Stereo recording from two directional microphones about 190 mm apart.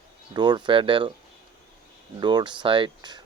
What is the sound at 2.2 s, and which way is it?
Speech, 25° right (ahead or behind).